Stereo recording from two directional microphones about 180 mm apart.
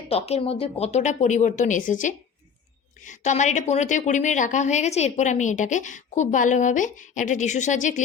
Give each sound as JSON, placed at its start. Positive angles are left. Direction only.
{"t": 0.1, "sound": "a woman's voice", "side_deg": 35}